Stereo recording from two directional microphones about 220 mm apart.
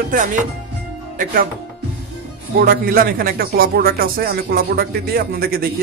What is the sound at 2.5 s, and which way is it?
A man's voice, 40° right (ahead or behind).